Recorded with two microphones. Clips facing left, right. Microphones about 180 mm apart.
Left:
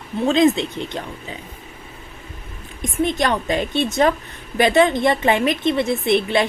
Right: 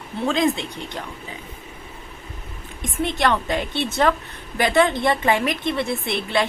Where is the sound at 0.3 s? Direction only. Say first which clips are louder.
Left 5 dB; 25° left (ahead or behind).